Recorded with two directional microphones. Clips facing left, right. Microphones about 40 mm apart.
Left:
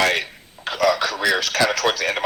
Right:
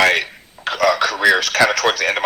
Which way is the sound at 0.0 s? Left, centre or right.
Right.